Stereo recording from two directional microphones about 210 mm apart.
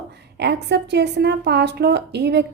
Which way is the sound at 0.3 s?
55° right (ahead or behind).